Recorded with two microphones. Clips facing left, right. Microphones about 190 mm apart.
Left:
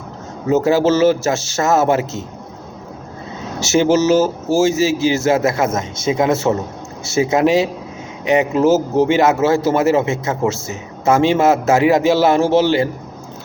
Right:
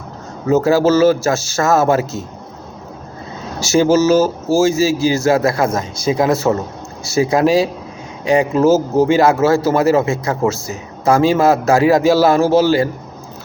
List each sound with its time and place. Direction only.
0.4 s speech: 20° left (ahead or behind)
3.6 s speech: 20° left (ahead or behind)